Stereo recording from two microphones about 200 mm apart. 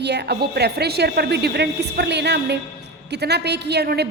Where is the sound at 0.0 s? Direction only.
55° right (ahead or behind).